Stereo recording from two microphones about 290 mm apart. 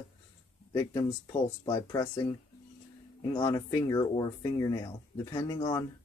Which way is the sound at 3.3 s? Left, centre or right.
Centre.